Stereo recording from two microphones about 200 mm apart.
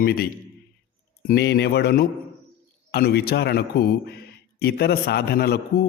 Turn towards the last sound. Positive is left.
turn(degrees=50)  # may be behind; listen again after turning